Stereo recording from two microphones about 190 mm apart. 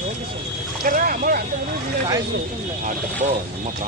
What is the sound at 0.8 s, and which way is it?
Vehicle, 45° right (ahead or behind).